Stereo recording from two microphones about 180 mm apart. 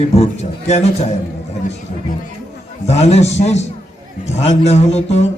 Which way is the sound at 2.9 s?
35° left (ahead or behind).